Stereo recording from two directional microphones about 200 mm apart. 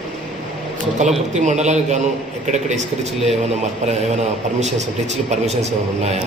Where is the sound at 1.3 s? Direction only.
35° right (ahead or behind).